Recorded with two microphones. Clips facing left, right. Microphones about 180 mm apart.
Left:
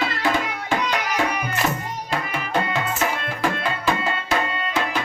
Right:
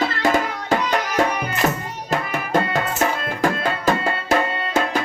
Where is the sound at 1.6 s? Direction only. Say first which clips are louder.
Right 3 dB; 40° right (ahead or behind).